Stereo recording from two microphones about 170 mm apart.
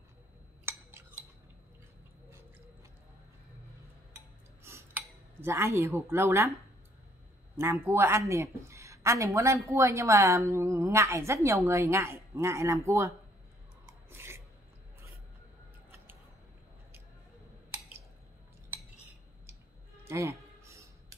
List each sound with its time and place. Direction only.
4.6 s cutlery: 15° right (ahead or behind)
7.5 s speech: 15° right (ahead or behind)
14.1 s filing: 15° right (ahead or behind)
20.1 s music: 15° right (ahead or behind)